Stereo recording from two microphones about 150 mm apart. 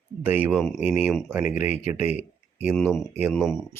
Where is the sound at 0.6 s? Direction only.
10° left (ahead or behind).